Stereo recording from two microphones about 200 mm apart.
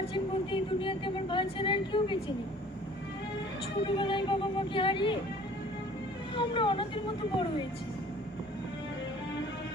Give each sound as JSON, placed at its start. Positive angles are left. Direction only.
{"t": 0.0, "sound": "a sound", "side_deg": 25}
{"t": 3.8, "sound": "speech", "side_deg": 25}
{"t": 6.3, "sound": "speech", "side_deg": 25}